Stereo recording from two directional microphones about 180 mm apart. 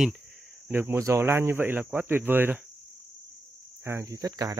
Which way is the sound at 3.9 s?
15° right (ahead or behind).